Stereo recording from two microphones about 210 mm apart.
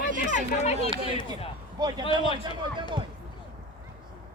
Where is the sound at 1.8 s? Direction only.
20° right (ahead or behind).